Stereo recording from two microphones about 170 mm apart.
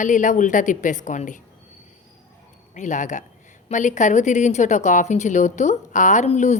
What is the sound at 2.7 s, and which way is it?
A woman's voice, 45° left (ahead or behind).